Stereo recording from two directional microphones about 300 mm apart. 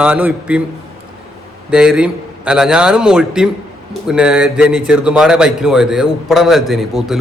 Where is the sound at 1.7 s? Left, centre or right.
Centre.